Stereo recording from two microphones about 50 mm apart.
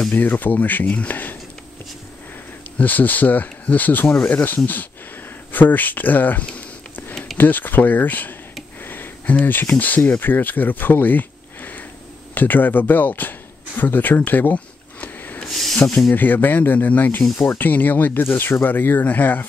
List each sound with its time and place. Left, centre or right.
0.1 s speech: left
2.8 s speech: left
8.8 s a sound: left
9.2 s speech: left
15.4 s a sound: centre
16.1 s speech: left